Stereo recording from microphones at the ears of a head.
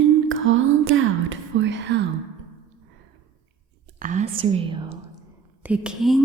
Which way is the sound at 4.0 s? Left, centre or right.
Right.